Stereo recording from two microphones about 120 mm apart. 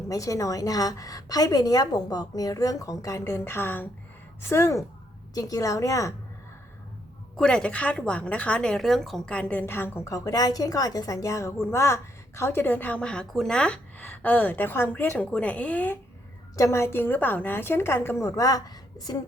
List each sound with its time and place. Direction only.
0.1 s a woman's voice: 30° left (ahead or behind)
7.3 s a woman's voice: 5° left (ahead or behind)
16.6 s a woman's voice: 25° left (ahead or behind)